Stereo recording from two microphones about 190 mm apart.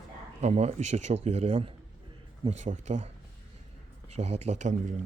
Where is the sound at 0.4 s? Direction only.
35° right (ahead or behind).